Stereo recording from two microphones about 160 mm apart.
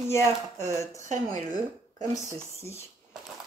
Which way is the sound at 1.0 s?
50° right (ahead or behind).